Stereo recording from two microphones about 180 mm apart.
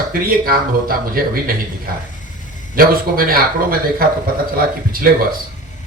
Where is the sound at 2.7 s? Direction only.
55° right (ahead or behind).